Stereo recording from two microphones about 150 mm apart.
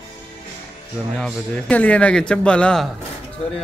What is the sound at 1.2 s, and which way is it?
A man's voice, 10° left (ahead or behind).